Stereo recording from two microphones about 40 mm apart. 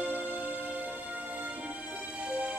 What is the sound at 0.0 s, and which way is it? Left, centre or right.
Music, right.